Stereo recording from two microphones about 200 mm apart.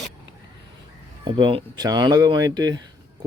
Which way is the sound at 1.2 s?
25° right (ahead or behind).